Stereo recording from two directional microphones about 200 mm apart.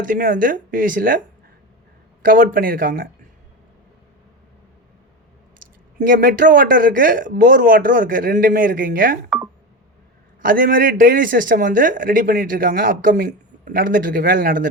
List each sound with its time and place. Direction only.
0.1 s speech: 45° right (ahead or behind)
2.2 s speech: 45° right (ahead or behind)
6.0 s speech: 45° right (ahead or behind)
10.4 s speech: 45° right (ahead or behind)